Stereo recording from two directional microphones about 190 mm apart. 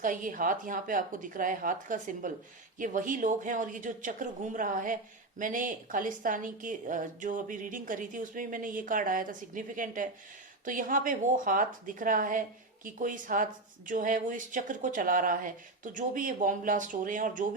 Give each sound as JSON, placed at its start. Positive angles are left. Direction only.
{"t": 0.0, "sound": "a woman's voice", "side_deg": -45}